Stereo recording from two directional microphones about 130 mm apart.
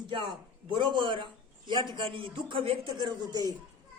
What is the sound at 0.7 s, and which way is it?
A man's voice, 35° right (ahead or behind).